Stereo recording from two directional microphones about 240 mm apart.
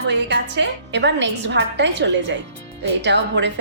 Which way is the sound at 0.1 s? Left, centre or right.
Right.